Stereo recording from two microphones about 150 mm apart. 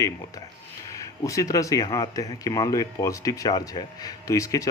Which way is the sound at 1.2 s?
20° left (ahead or behind).